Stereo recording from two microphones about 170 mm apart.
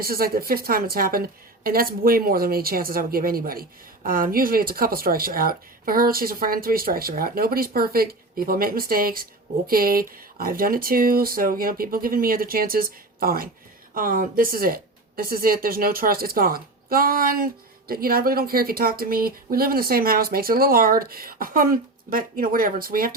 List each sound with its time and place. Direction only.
0.0 s a woman's voice: 60° right (ahead or behind)